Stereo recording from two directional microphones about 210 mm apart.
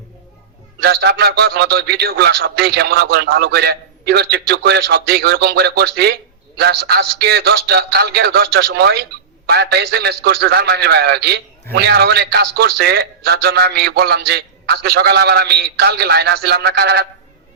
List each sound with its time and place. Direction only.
0.8 s a man's voice: 50° right (ahead or behind)